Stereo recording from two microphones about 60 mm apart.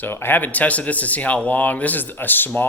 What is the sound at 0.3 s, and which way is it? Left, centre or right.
Speech, left.